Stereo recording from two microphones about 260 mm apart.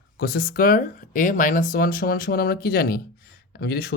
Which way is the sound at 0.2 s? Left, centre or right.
Left.